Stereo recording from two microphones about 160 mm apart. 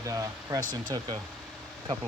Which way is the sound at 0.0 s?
20° right (ahead or behind).